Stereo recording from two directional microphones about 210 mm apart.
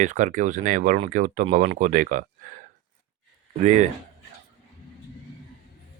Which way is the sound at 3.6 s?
35° right (ahead or behind).